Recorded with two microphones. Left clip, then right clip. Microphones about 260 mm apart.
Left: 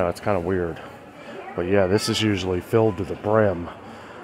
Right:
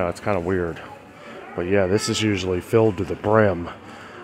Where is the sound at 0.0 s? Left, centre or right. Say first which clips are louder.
Even; centre.